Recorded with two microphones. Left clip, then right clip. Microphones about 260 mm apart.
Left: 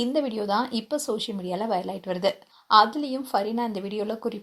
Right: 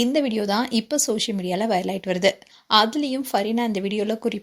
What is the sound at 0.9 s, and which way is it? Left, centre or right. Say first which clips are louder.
Speech: right 4 dB; right.